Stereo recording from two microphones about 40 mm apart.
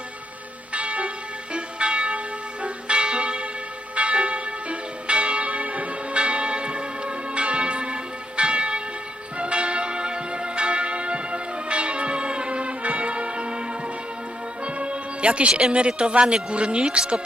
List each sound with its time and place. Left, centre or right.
0.7 s church bell: right
14.6 s music: right
15.7 s a man's voice: right